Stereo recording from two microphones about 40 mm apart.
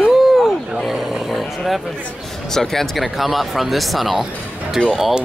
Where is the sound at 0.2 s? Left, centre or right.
Centre.